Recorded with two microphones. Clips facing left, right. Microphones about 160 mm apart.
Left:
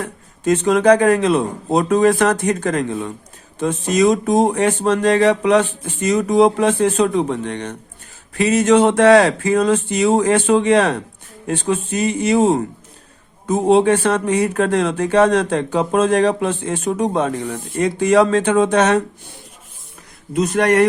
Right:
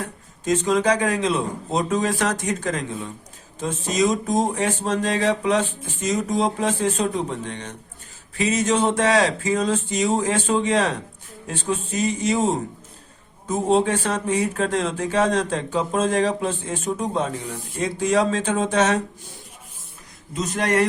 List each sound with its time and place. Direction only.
0.4 s speech: 60° left (ahead or behind)
20.3 s speech: 60° left (ahead or behind)